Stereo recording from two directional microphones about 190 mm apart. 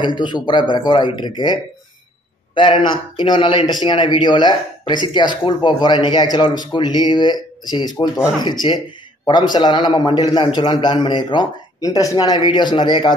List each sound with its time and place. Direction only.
0.0 s speech: 25° left (ahead or behind)